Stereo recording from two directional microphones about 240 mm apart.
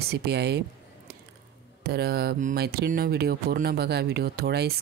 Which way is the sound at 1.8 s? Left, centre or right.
Right.